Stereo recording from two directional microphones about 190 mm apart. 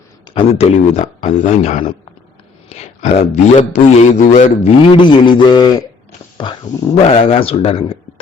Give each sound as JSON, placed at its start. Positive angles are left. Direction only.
{"t": 0.3, "sound": "a man's voice", "side_deg": 30}
{"t": 6.9, "sound": "a man's voice", "side_deg": 30}